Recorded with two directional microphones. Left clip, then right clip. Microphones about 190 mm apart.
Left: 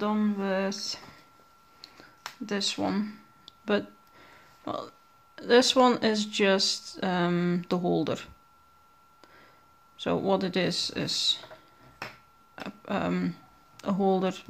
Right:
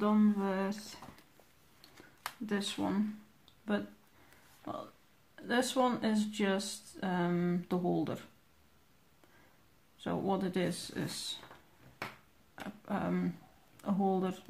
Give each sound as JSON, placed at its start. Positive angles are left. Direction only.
{"t": 0.0, "sound": "speech", "side_deg": 40}
{"t": 2.4, "sound": "speech", "side_deg": 40}
{"t": 3.4, "sound": "a sound", "side_deg": 35}
{"t": 4.7, "sound": "speech", "side_deg": 40}
{"t": 10.0, "sound": "speech", "side_deg": 40}
{"t": 12.5, "sound": "speech", "side_deg": 40}